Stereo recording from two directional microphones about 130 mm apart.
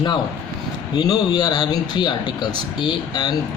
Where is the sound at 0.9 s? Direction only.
30° left (ahead or behind).